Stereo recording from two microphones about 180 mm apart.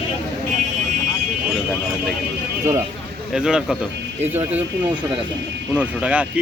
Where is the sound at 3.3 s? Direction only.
5° right (ahead or behind).